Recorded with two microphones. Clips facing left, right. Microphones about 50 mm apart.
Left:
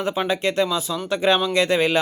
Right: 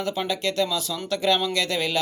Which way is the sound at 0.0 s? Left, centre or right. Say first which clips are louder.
Left 4 dB; left.